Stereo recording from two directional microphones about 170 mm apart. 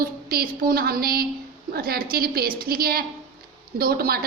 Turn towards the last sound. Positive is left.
turn(degrees=-60)  # may be behind; listen again after turning